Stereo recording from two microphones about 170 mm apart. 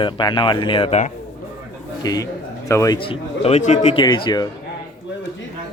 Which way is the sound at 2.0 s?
20° left (ahead or behind).